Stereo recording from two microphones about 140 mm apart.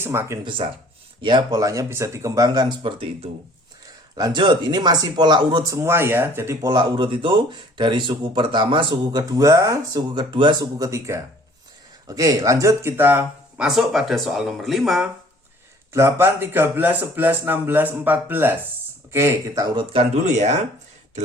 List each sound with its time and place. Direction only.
0.0 s speech: 15° right (ahead or behind)
0.4 s speech: 40° right (ahead or behind)
5.7 s speech: 20° right (ahead or behind); by 15.1 s centre (ahead or behind)
15.9 s speech: 20° right (ahead or behind)
19.9 s speech: 50° right (ahead or behind)